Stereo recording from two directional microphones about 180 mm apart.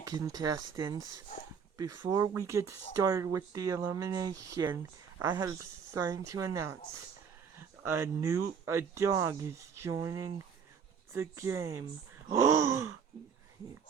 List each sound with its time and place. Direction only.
0.0 s speech: 20° right (ahead or behind)